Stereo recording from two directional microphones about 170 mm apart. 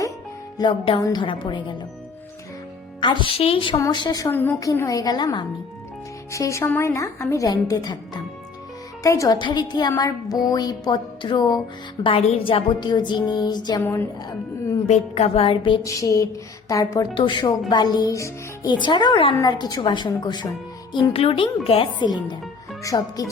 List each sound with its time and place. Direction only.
0.6 s speech: 30° left (ahead or behind)
3.0 s speech: 25° left (ahead or behind)
13.8 s a woman's voice: 10° left (ahead or behind)
14.8 s speech: 40° left (ahead or behind)
15.9 s speech: 20° left (ahead or behind)